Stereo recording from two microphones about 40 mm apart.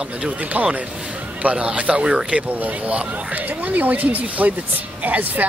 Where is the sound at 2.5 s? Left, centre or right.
Right.